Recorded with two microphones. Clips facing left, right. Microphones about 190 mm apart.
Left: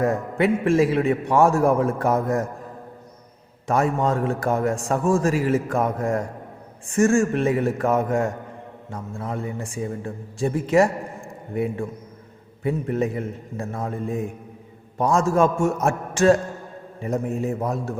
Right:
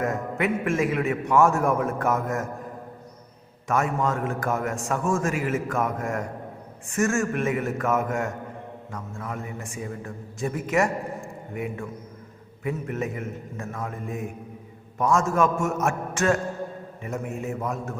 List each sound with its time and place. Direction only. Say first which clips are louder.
0.0 s a man's voice: left 5 dB; 30° left (ahead or behind)
3.7 s a man's voice: left 4 dB; 30° left (ahead or behind)